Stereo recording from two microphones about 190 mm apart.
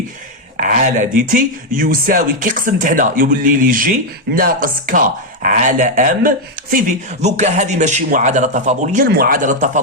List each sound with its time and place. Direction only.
0.5 s speech: 50° right (ahead or behind)